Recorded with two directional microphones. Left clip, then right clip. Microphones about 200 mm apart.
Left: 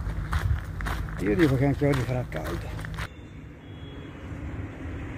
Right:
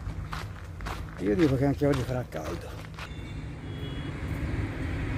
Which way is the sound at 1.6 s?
20° right (ahead or behind).